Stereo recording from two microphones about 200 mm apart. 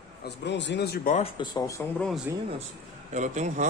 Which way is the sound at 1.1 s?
25° left (ahead or behind).